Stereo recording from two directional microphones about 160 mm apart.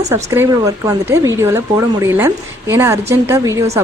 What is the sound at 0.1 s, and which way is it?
Speech, 15° right (ahead or behind).